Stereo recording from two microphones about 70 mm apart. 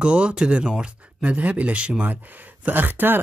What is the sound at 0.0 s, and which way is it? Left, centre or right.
Speech, centre.